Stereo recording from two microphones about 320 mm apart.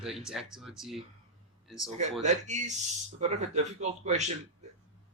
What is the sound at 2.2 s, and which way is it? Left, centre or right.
Speech, right.